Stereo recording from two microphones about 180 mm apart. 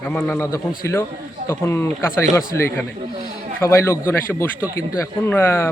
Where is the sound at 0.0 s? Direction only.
5° left (ahead or behind).